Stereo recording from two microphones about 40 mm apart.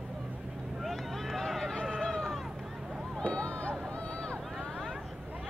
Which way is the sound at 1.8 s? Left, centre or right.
Centre.